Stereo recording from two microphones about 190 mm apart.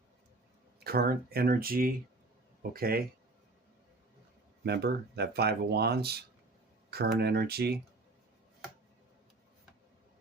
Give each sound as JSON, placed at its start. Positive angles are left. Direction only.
{"t": 0.9, "sound": "speech", "side_deg": -55}
{"t": 4.6, "sound": "speech", "side_deg": -60}